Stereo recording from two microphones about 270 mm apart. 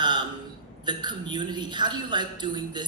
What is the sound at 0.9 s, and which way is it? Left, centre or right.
A woman's voice, centre.